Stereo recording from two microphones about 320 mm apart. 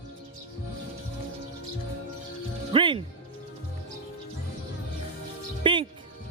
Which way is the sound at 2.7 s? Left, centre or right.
Centre.